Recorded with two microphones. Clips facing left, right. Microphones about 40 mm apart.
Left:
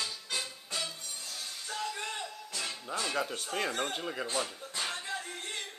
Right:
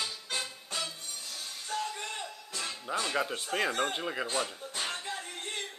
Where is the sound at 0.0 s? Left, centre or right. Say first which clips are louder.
Right 1 dB; centre.